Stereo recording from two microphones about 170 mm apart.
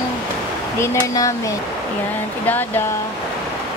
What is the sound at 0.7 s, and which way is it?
Speech, 20° left (ahead or behind).